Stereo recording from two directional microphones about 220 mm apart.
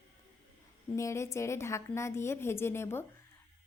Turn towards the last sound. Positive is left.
turn(degrees=10)  # may be behind; listen again after turning